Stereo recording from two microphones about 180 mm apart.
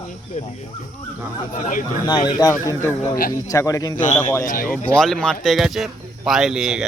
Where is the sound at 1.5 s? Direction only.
45° left (ahead or behind).